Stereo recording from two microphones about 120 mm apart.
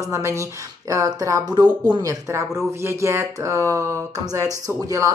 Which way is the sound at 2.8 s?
25° right (ahead or behind).